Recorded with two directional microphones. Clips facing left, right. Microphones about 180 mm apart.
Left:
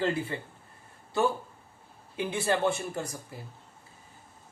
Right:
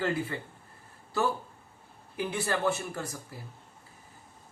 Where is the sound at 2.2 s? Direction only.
25° left (ahead or behind).